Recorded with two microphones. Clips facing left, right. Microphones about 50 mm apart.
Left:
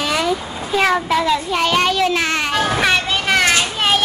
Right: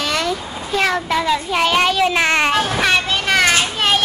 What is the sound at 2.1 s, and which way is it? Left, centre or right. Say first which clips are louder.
Speech: right 3 dB; right.